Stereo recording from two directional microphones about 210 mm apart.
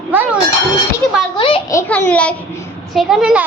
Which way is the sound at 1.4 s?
25° left (ahead or behind).